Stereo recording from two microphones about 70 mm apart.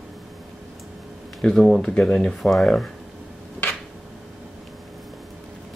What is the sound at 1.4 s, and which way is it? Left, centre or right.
Speech, centre.